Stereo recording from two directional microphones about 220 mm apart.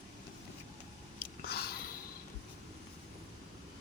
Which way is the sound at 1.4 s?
45° left (ahead or behind).